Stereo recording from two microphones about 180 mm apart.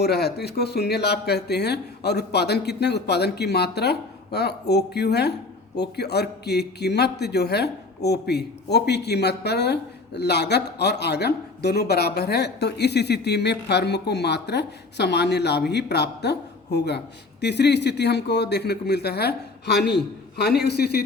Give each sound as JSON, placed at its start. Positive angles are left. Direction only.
{"t": 0.0, "sound": "a man's voice", "side_deg": 60}